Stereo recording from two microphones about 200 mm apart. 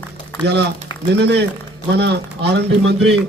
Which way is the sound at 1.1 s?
55° right (ahead or behind).